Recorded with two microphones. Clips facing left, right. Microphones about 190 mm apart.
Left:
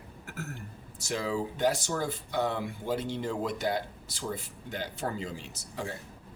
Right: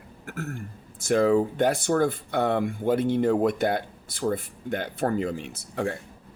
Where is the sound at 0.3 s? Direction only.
50° right (ahead or behind).